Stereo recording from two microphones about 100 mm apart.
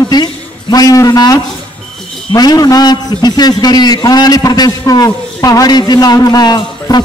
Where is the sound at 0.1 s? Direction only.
45° left (ahead or behind).